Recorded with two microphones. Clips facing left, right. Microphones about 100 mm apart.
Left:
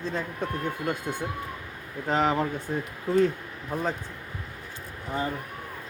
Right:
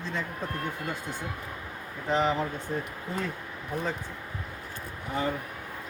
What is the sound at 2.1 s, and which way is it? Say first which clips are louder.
Speech: left 1 dB; 50° left (ahead or behind).